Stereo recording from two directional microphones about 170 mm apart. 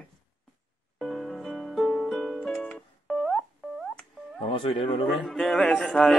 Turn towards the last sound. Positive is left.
turn(degrees=0)  # may be behind; listen again after turning